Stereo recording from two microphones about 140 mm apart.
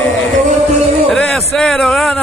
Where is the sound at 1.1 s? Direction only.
5° left (ahead or behind).